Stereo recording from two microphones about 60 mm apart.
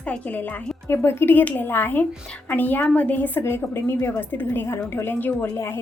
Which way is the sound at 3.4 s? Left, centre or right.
Left.